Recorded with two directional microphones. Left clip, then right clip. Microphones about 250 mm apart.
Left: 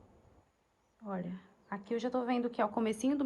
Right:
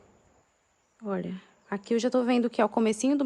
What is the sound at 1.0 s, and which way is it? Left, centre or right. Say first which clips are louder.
Speech: right 8 dB; right.